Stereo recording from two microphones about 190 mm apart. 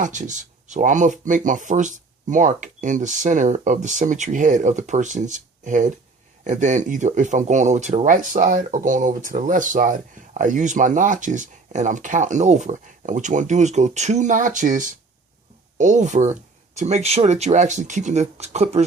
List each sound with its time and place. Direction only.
0.0 s speech: 40° right (ahead or behind)